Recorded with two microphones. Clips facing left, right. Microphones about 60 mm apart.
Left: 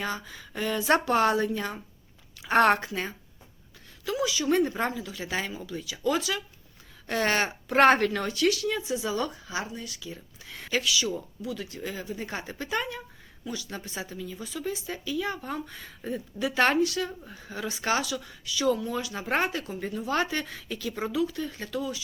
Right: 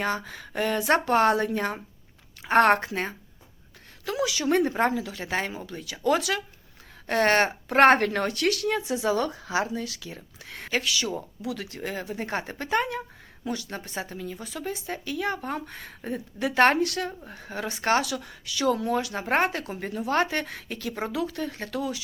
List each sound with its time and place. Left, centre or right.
0.0 s speech: right
0.9 s speech: right
2.4 s speech: right
8.8 s speech: right
10.5 s speech: right
11.4 s speech: right